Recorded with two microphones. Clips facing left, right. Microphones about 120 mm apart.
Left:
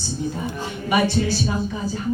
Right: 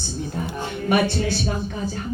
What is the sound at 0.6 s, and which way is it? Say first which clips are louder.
Speech: even; 55° right (ahead or behind).